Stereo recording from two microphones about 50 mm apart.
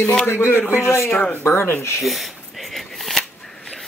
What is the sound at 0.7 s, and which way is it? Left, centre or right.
Speech, left.